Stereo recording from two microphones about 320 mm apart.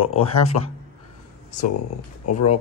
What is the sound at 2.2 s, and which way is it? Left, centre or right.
Speech, left.